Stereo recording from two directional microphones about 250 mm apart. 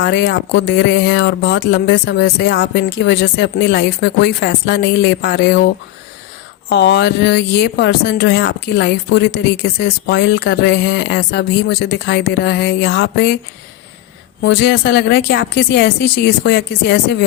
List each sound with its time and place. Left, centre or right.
0.0 s speech: left
14.4 s speech: left